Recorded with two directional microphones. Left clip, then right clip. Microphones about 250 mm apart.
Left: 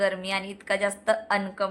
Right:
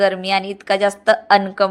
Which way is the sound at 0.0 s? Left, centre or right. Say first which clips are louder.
Right 10 dB; right.